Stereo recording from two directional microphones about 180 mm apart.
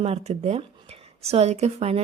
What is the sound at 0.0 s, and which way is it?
Speech, 35° right (ahead or behind).